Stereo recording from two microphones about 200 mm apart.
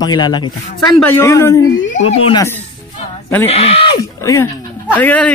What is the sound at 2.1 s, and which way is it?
Speech, 25° left (ahead or behind).